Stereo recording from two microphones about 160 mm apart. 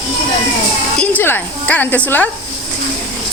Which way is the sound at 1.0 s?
10° left (ahead or behind).